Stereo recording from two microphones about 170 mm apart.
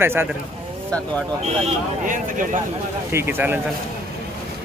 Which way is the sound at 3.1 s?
15° right (ahead or behind).